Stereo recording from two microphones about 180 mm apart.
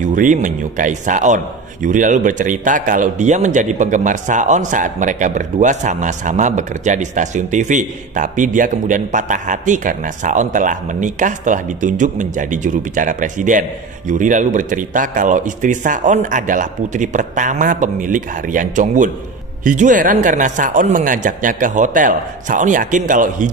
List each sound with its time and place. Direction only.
0.0 s a man's voice: 45° right (ahead or behind)